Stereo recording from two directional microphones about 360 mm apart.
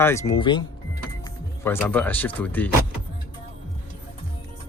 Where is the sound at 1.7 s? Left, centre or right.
Centre.